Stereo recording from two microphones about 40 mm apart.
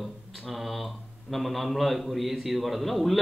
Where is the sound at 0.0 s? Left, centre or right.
Centre.